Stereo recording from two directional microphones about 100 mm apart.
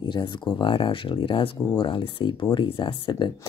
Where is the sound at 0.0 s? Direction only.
50° left (ahead or behind).